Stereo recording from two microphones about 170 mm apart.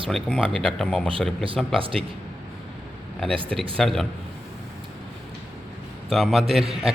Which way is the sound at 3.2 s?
Centre (ahead or behind).